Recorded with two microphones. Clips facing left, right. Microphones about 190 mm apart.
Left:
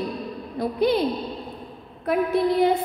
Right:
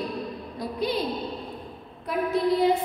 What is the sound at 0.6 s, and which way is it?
Speech, 55° left (ahead or behind).